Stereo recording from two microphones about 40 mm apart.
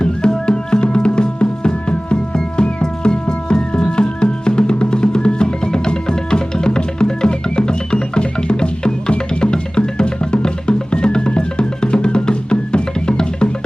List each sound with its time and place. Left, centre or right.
0.0 s music: centre